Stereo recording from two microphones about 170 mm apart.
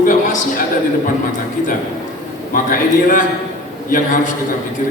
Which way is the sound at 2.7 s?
50° left (ahead or behind).